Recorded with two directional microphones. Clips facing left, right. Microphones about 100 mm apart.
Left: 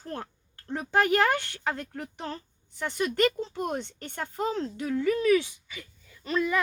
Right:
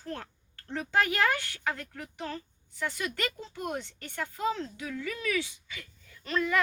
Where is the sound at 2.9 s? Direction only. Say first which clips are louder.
Left 9 dB; 40° left (ahead or behind).